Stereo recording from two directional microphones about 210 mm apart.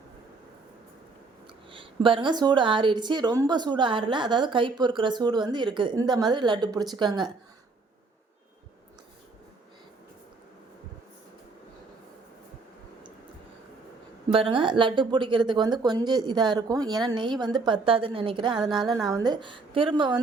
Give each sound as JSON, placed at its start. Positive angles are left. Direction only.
{"t": 1.7, "sound": "a woman's voice", "side_deg": -25}
{"t": 14.3, "sound": "a woman's voice", "side_deg": -25}